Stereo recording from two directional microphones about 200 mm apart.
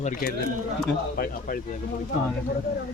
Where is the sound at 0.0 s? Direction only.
45° left (ahead or behind).